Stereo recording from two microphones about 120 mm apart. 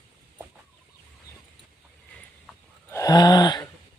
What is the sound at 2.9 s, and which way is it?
Gasp, 30° left (ahead or behind).